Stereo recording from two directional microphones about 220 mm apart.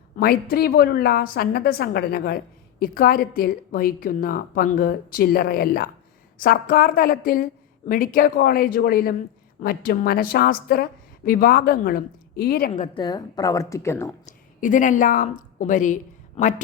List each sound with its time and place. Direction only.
0.2 s a woman's voice: 45° left (ahead or behind)
13.0 s speech: 20° left (ahead or behind)
14.3 s a woman's voice: 35° left (ahead or behind)